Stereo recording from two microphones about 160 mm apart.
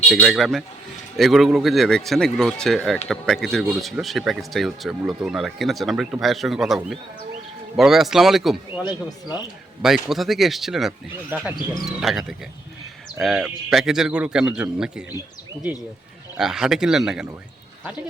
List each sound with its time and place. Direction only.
0.1 s speech: centre (ahead or behind)
8.8 s speech: 25° left (ahead or behind)
9.8 s speech: centre (ahead or behind)
13.2 s speech: centre (ahead or behind)
16.4 s speech: 5° right (ahead or behind)